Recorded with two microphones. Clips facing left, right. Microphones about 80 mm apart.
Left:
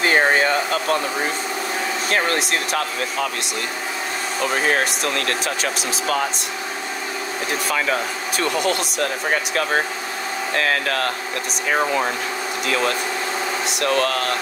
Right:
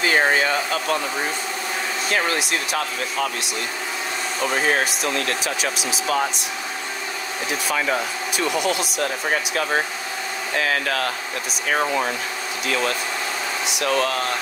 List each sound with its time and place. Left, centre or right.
0.0 s a sound: left
2.0 s speech: left
4.6 s speech: left
8.4 s speech: left
13.7 s speech: left